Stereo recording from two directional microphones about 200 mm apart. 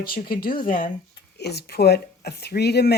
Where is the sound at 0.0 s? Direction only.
50° left (ahead or behind).